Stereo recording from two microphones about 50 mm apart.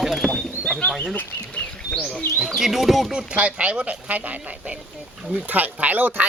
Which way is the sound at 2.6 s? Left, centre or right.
Centre.